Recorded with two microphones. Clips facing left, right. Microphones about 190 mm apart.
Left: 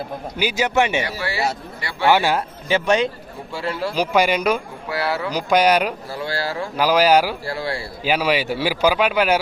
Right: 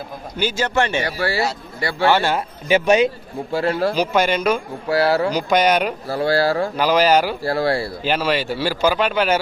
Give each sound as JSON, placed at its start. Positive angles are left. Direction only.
{"t": 0.3, "sound": "speech", "side_deg": 15}
{"t": 1.0, "sound": "speech", "side_deg": -35}
{"t": 2.0, "sound": "speech", "side_deg": 15}
{"t": 2.6, "sound": "a man's voice", "side_deg": -10}
{"t": 3.5, "sound": "speech", "side_deg": -45}
{"t": 3.9, "sound": "speech", "side_deg": 5}
{"t": 4.9, "sound": "speech", "side_deg": -35}
{"t": 5.3, "sound": "speech", "side_deg": 5}
{"t": 6.1, "sound": "speech", "side_deg": -35}
{"t": 6.7, "sound": "speech", "side_deg": 5}
{"t": 7.4, "sound": "speech", "side_deg": -40}
{"t": 8.0, "sound": "speech", "side_deg": 10}